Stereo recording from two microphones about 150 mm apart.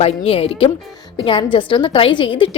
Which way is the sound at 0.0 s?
40° left (ahead or behind).